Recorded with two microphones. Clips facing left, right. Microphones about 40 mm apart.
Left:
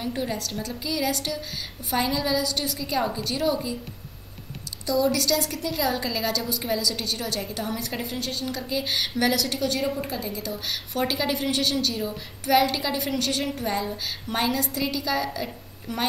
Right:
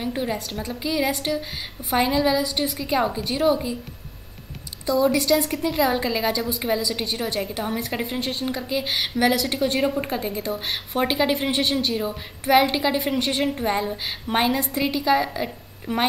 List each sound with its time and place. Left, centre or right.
0.0 s a woman's voice: centre
4.8 s a woman's voice: right
8.5 s a woman's voice: centre